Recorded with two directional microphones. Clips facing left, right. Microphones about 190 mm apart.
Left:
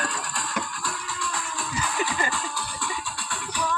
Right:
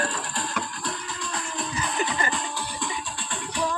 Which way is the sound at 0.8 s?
20° right (ahead or behind).